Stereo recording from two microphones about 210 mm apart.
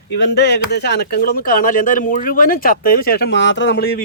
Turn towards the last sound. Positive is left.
turn(degrees=50)  # may be behind; listen again after turning